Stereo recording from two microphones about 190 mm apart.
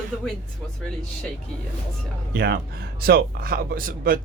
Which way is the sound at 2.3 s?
55° right (ahead or behind).